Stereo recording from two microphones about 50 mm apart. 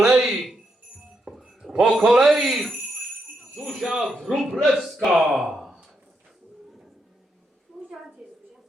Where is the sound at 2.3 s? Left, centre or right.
Centre.